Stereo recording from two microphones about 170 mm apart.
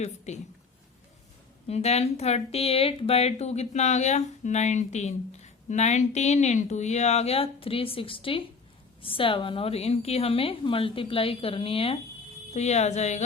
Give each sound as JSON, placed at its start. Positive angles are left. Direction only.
{"t": 0.3, "sound": "speech", "side_deg": 40}
{"t": 1.6, "sound": "speech", "side_deg": 40}